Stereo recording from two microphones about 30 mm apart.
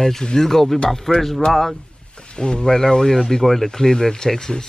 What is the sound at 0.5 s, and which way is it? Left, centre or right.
A man's voice, centre.